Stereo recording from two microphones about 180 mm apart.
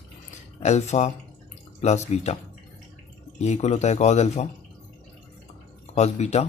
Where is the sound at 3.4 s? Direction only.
40° left (ahead or behind).